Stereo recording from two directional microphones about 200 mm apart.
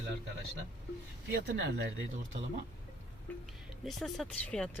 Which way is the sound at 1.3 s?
60° right (ahead or behind).